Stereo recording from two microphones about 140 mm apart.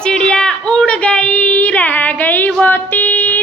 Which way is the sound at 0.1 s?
5° left (ahead or behind).